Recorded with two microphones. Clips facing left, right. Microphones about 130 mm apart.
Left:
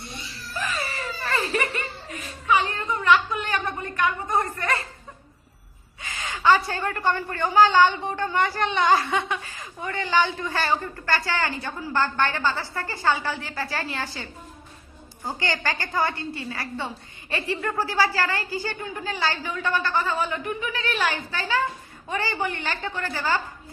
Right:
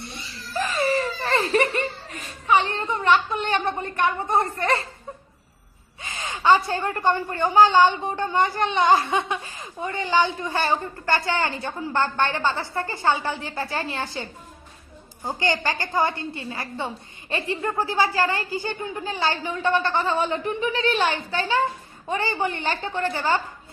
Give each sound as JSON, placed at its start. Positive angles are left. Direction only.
{"t": 0.8, "sound": "laughter", "side_deg": -35}
{"t": 6.0, "sound": "a woman's voice", "side_deg": -25}
{"t": 15.3, "sound": "a woman's voice", "side_deg": -20}